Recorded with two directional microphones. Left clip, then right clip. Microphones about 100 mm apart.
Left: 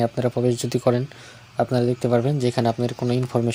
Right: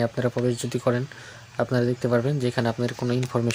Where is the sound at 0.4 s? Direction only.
25° left (ahead or behind).